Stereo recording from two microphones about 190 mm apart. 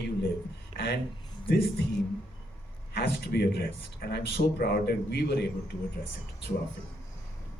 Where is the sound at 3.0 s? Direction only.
55° left (ahead or behind).